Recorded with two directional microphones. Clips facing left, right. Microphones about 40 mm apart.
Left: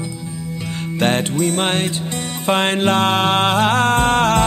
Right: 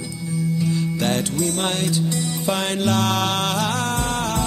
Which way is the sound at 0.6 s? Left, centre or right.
Left.